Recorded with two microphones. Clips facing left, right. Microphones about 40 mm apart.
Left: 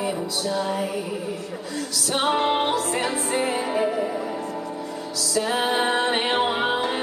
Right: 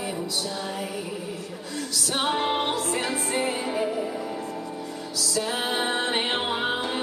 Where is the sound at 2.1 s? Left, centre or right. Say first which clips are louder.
Left 4 dB; centre.